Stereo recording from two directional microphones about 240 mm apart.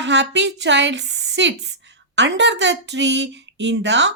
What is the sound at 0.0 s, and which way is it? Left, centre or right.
Speech, right.